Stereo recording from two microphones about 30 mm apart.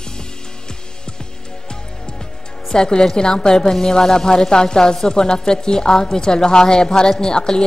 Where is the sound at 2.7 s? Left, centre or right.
Left.